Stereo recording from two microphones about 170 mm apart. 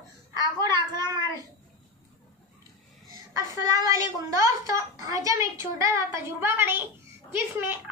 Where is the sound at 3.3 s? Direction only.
20° right (ahead or behind).